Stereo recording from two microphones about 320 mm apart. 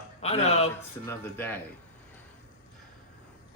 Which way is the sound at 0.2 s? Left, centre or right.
Centre.